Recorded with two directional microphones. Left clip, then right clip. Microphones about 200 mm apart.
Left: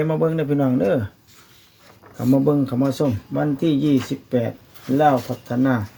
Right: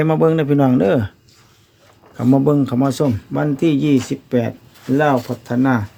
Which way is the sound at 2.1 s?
30° right (ahead or behind).